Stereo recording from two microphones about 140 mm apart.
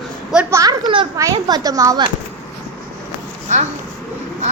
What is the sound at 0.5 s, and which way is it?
Speech, 25° right (ahead or behind).